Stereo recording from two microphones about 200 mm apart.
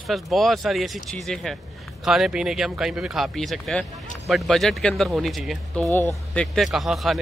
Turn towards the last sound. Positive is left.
turn(degrees=0)  # may be behind; listen again after turning